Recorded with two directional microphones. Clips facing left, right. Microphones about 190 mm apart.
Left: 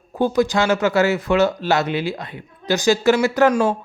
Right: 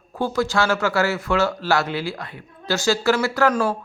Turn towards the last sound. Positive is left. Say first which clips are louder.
# left 4 dB
turn(degrees=20)  # may be behind; listen again after turning